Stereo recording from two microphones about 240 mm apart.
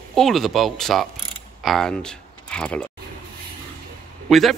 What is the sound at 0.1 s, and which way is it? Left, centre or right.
A man's voice, centre.